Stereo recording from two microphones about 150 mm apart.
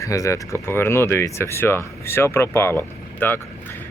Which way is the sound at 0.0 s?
20° left (ahead or behind).